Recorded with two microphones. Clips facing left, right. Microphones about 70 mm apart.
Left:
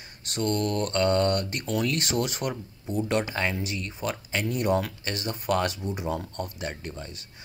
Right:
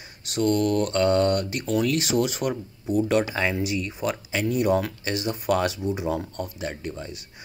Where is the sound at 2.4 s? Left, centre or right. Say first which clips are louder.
Right 4 dB; centre.